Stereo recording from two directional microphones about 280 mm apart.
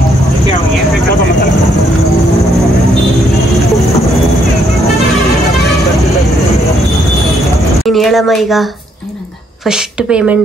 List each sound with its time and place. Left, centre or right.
7.8 s a woman's voice: centre
9.7 s a woman's voice: centre